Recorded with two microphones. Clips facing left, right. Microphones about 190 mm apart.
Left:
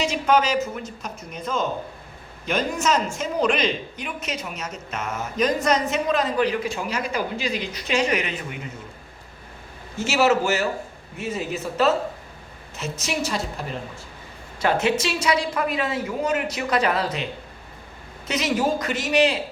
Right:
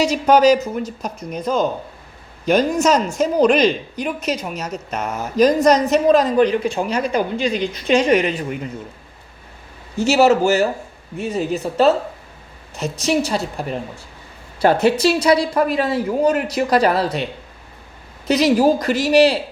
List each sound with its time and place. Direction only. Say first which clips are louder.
0.0 s a woman's voice: right 7 dB; 40° right (ahead or behind)
10.0 s a woman's voice: right 6 dB; 35° right (ahead or behind)
14.6 s a woman's voice: right 7 dB; 35° right (ahead or behind)
18.3 s a woman's voice: right 8 dB; 35° right (ahead or behind)